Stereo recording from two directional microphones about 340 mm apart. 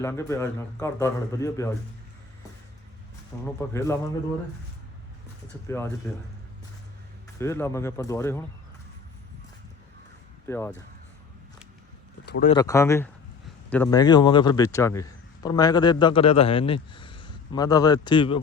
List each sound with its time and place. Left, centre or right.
0.0 s a man's voice: centre
3.3 s a man's voice: centre
5.6 s a man's voice: centre
7.3 s a man's voice: centre
10.4 s a man's voice: centre
12.2 s a sound: left
12.5 s a man's voice: centre